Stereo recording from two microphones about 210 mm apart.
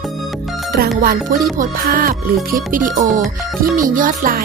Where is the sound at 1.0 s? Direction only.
45° right (ahead or behind).